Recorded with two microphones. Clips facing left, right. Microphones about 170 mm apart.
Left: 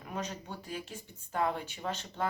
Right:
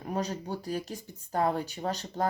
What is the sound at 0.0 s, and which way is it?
Speech, 35° right (ahead or behind).